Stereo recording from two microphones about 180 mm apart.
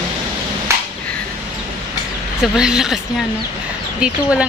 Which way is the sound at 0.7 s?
15° right (ahead or behind).